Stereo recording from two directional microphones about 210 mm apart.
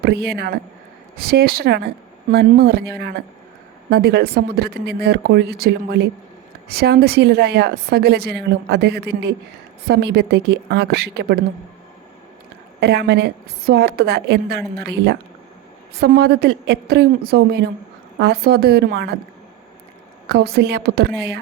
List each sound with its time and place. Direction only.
0.0 s a woman's voice: 50° right (ahead or behind)
12.8 s a woman's voice: 50° right (ahead or behind)
20.2 s a woman's voice: 50° right (ahead or behind)